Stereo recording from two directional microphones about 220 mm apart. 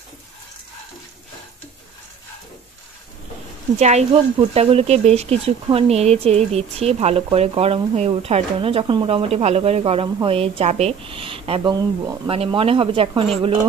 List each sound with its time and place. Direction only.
3.8 s speech: 30° right (ahead or behind)